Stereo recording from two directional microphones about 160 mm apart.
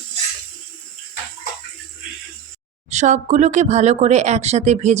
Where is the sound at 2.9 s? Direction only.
45° right (ahead or behind).